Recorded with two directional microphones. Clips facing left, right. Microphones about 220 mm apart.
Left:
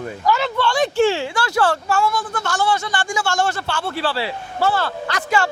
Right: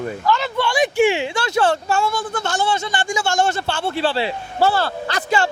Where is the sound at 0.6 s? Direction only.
15° right (ahead or behind).